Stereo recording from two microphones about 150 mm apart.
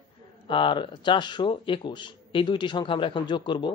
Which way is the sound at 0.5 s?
35° left (ahead or behind).